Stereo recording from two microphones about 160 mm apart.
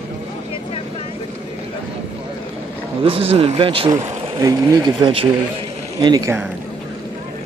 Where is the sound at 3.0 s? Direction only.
40° right (ahead or behind).